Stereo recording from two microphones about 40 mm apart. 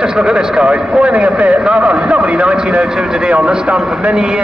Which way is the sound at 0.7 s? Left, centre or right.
Right.